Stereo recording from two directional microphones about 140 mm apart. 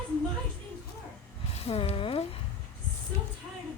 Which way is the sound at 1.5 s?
45° left (ahead or behind).